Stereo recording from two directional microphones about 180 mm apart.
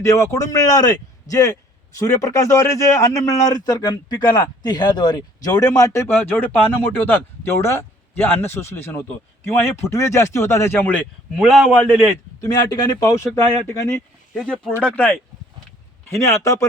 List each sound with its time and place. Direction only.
0.0 s a man's voice: 15° left (ahead or behind)
7.6 s a man's voice: 15° left (ahead or behind)
12.4 s speech: 20° left (ahead or behind)
14.3 s a man's voice: 5° left (ahead or behind)